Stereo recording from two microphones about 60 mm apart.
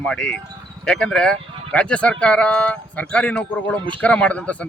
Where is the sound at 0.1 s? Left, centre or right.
Centre.